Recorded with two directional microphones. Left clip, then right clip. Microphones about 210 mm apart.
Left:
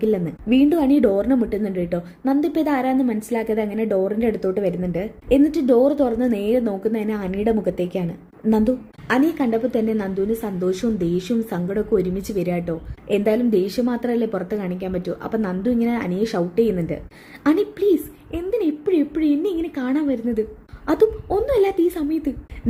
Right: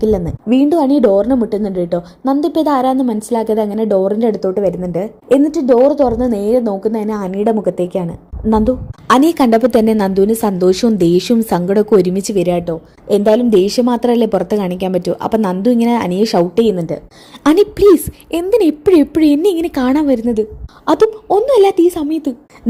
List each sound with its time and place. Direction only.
0.0 s a woman's voice: 10° right (ahead or behind)
9.0 s a woman's voice: 35° right (ahead or behind)
16.7 s a woman's voice: 10° right (ahead or behind)
17.4 s a woman's voice: 30° right (ahead or behind)
20.8 s a woman's voice: 20° right (ahead or behind)